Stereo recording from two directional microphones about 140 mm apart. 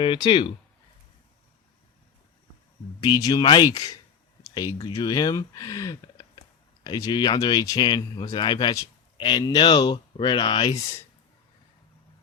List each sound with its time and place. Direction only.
0.0 s speech: 35° left (ahead or behind)
3.0 s speech: 30° left (ahead or behind)
10.8 s speech: 20° left (ahead or behind)